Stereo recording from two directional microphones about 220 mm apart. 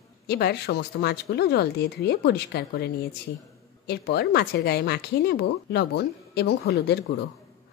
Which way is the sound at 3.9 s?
45° left (ahead or behind).